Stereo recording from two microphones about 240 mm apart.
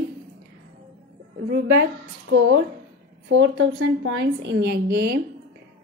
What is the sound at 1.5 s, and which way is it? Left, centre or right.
A woman's voice, right.